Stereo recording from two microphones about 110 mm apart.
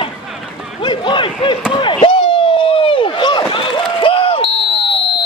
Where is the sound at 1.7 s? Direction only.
45° left (ahead or behind).